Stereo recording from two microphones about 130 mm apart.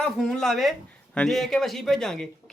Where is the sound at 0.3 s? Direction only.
5° left (ahead or behind).